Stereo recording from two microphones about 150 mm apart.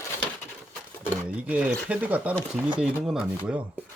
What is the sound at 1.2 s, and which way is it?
Speech, 10° right (ahead or behind).